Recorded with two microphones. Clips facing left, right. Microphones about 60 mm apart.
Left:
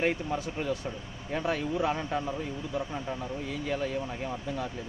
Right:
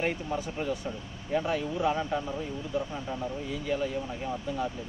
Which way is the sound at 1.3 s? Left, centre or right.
Left.